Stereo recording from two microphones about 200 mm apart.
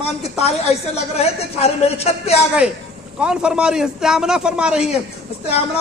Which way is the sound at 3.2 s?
5° right (ahead or behind).